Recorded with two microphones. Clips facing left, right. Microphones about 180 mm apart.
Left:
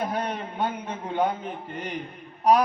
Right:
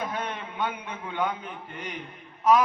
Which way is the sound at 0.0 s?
40° left (ahead or behind).